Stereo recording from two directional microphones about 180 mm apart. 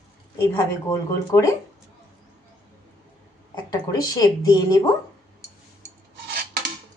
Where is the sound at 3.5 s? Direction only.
20° left (ahead or behind).